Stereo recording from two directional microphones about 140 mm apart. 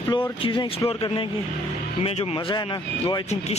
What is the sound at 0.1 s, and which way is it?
Speech, 40° left (ahead or behind).